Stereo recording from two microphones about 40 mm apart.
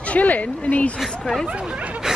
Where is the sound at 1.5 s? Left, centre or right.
Right.